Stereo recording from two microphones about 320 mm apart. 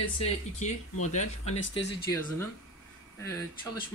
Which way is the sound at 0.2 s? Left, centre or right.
Left.